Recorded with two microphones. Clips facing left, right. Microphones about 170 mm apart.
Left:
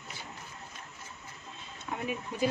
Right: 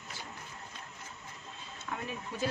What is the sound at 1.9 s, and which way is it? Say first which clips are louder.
Speech: left 2 dB; 20° left (ahead or behind).